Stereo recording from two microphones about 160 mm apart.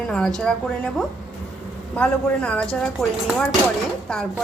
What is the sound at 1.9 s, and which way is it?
A man's voice, 10° left (ahead or behind).